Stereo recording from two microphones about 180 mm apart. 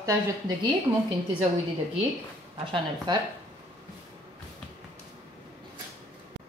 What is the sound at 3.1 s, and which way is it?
Speech, 20° right (ahead or behind).